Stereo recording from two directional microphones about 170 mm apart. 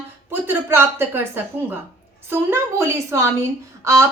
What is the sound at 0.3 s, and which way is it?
Speech, 15° right (ahead or behind).